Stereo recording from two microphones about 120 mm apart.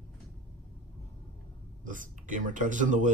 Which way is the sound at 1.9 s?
90° right.